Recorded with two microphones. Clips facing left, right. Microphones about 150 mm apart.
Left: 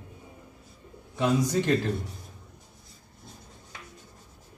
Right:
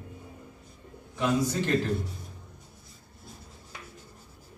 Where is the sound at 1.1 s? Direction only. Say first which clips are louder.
Left 2 dB; 15° left (ahead or behind).